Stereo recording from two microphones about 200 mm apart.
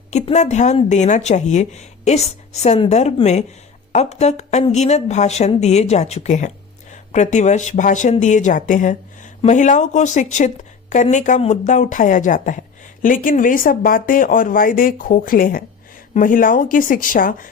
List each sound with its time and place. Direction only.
0.1 s speech: 35° left (ahead or behind)